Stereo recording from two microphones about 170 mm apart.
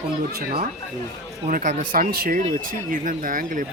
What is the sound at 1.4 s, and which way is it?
Speech, 50° right (ahead or behind).